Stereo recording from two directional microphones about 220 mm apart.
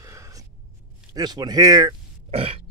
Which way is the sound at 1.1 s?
20° right (ahead or behind).